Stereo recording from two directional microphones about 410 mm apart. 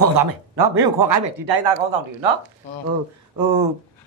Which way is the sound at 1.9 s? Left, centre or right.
Right.